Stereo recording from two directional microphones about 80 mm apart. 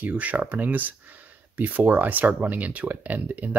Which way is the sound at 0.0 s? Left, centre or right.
Centre.